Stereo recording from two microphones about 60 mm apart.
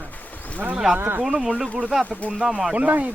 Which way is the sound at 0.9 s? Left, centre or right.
Right.